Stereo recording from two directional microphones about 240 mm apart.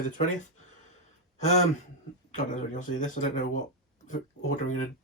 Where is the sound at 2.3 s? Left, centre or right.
Left.